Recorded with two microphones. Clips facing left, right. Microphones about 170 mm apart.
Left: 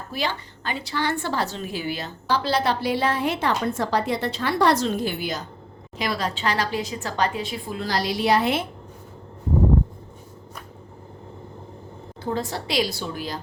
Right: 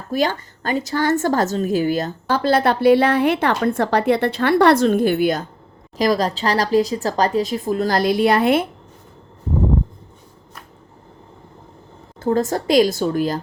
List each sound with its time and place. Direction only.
0.1 s a woman's voice: 45° right (ahead or behind)
6.0 s a woman's voice: 40° right (ahead or behind); by 8.6 s 55° right (ahead or behind)
12.2 s a woman's voice: 45° right (ahead or behind)